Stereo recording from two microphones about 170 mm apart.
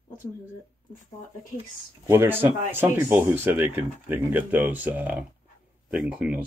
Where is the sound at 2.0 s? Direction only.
15° right (ahead or behind).